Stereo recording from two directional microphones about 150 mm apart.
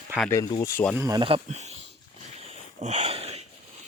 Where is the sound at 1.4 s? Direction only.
50° right (ahead or behind).